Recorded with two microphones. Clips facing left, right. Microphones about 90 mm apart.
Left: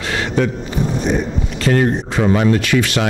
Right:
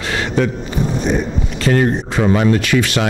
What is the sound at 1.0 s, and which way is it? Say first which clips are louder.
Speech: even; 25° right (ahead or behind).